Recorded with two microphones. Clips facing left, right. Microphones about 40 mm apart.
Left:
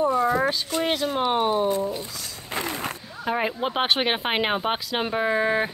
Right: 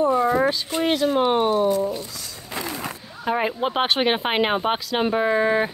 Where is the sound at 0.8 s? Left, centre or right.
Centre.